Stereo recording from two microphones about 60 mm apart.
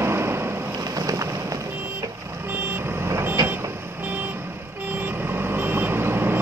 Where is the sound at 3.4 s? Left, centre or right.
Right.